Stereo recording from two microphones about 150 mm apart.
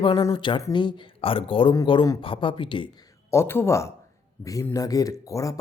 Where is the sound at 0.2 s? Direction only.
25° left (ahead or behind).